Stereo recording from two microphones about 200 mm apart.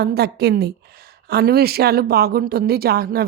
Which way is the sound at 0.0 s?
55° right (ahead or behind).